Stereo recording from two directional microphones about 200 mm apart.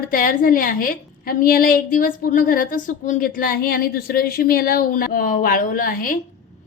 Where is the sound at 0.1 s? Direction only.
45° left (ahead or behind).